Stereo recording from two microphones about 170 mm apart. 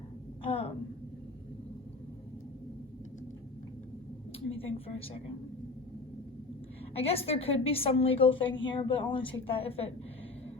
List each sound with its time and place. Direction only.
0.4 s a sound: 30° left (ahead or behind)
4.4 s a woman's voice: 35° left (ahead or behind)
6.9 s a woman's voice: 35° left (ahead or behind)